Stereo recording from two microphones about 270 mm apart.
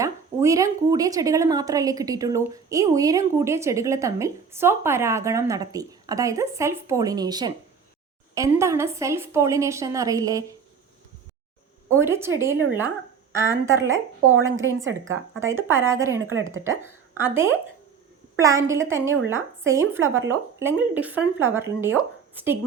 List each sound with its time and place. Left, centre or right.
0.0 s speech: centre
11.9 s speech: centre
16.2 s speech: right
17.2 s speech: centre